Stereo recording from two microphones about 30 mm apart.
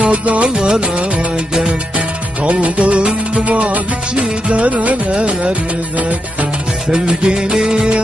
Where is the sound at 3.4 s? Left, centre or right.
Right.